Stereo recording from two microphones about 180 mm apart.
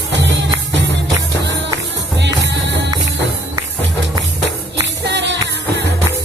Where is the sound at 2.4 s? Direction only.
85° right.